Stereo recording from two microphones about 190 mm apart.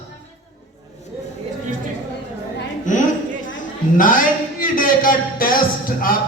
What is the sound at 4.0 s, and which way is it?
Music, 45° left (ahead or behind).